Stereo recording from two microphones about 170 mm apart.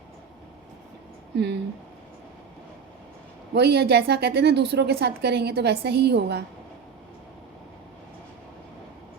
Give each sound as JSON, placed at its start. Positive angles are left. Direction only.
{"t": 1.4, "sound": "speech", "side_deg": -80}
{"t": 3.5, "sound": "a woman's voice", "side_deg": -75}